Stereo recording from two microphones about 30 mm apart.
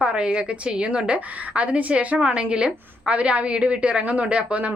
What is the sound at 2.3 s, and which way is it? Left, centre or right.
A woman's voice, right.